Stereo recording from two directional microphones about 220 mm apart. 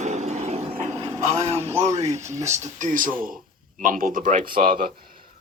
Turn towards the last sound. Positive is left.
turn(degrees=-40)  # may be behind; listen again after turning